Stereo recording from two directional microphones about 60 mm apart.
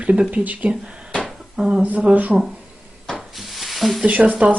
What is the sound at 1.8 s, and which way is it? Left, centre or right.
Speech, right.